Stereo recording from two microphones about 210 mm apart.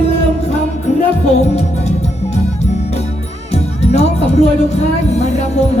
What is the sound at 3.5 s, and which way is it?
Music, 30° left (ahead or behind).